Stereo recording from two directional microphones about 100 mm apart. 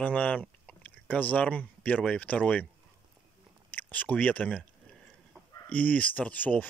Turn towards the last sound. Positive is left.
turn(degrees=15)  # may be behind; listen again after turning